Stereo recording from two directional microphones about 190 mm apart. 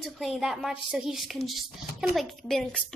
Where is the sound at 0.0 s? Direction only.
Centre (ahead or behind).